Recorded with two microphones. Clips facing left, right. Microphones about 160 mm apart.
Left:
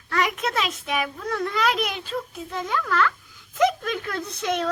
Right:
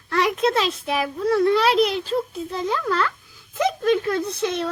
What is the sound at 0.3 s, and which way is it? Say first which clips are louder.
A child's voice: right 6 dB; 30° right (ahead or behind).